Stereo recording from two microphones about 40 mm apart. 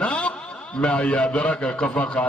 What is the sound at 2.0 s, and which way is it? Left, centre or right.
Speech, left.